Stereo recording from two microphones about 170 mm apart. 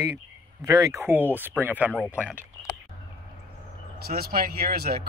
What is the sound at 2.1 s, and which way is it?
Speech, 10° right (ahead or behind).